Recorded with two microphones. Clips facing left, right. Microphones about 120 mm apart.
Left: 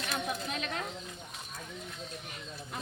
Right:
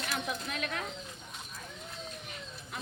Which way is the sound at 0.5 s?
25° left (ahead or behind).